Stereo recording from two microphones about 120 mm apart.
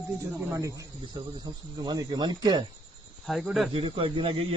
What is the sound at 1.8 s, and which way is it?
Speech, 35° right (ahead or behind).